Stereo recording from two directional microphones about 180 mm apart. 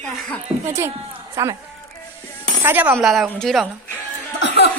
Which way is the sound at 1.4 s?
15° right (ahead or behind).